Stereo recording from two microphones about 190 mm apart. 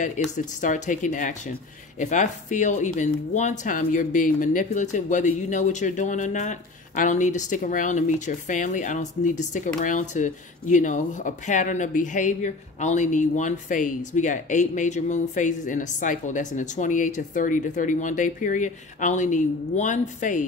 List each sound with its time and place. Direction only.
0.2 s speech: 40° left (ahead or behind)